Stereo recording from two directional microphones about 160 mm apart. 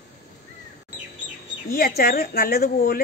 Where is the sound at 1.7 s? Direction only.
70° left (ahead or behind).